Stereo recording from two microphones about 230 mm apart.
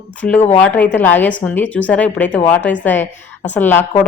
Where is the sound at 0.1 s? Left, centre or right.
Centre.